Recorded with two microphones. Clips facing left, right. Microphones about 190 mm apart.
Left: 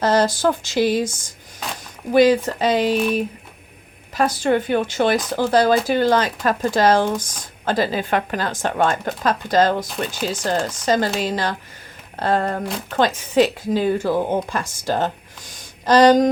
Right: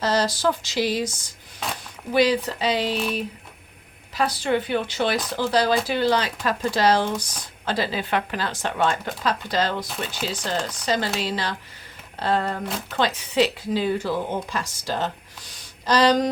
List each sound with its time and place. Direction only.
0.0 s speech: 50° left (ahead or behind)
2.1 s speech: 45° left (ahead or behind)
4.1 s speech: 50° left (ahead or behind)